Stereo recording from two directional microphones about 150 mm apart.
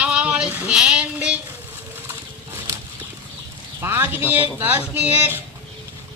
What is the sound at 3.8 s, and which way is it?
Speech, 15° right (ahead or behind).